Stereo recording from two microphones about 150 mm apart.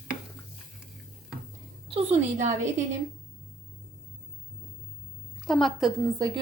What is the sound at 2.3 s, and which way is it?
Speech, 55° right (ahead or behind).